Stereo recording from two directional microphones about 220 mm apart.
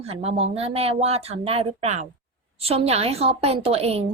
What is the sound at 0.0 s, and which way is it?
A woman's voice, 30° right (ahead or behind).